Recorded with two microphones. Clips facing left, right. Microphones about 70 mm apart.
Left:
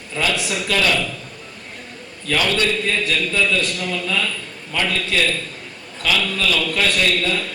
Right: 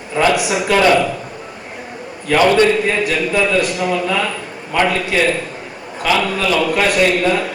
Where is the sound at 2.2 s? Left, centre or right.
Right.